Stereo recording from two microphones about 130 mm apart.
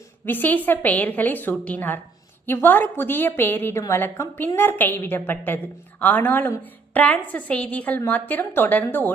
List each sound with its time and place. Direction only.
0.3 s a woman's voice: 15° left (ahead or behind)